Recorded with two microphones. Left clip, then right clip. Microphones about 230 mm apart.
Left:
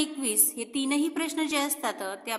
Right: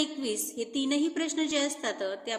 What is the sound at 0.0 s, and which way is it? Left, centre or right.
A woman's voice, left.